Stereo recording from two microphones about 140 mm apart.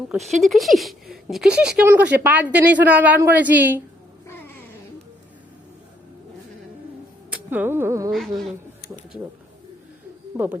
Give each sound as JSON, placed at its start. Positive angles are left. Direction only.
{"t": 0.1, "sound": "speech", "side_deg": 0}
{"t": 7.3, "sound": "speech", "side_deg": -15}
{"t": 8.1, "sound": "speech", "side_deg": 0}
{"t": 10.3, "sound": "speech", "side_deg": -15}